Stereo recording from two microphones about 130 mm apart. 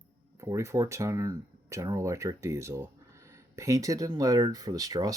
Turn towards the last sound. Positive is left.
turn(degrees=-30)  # may be behind; listen again after turning